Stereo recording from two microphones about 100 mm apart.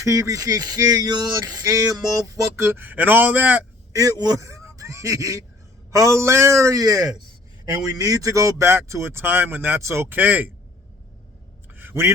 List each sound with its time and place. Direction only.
0.0 s speech: 35° right (ahead or behind)
2.6 s a man's voice: 20° right (ahead or behind)
3.9 s speech: 35° right (ahead or behind); by 10.5 s 20° right (ahead or behind)
11.7 s a sound: 20° right (ahead or behind)